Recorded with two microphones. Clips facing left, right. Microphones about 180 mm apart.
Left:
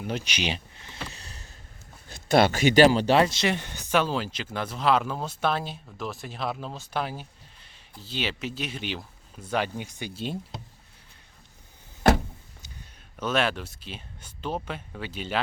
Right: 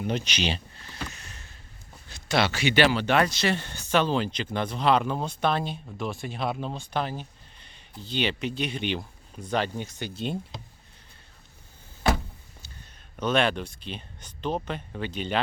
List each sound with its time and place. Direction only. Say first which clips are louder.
0.0 s speech: right 2 dB; 5° left (ahead or behind)
1.1 s boat: left 1 dB; 35° left (ahead or behind)
2.0 s speech: left 5 dB; 50° left (ahead or behind); by 10.3 s 10° left (ahead or behind)
12.6 s speech: left 1 dB; 10° left (ahead or behind)